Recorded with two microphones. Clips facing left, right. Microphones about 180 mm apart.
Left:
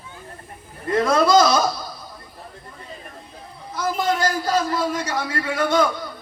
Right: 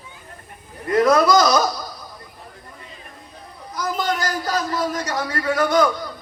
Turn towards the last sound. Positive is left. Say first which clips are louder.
# right 2 dB
turn(degrees=25)  # may be behind; listen again after turning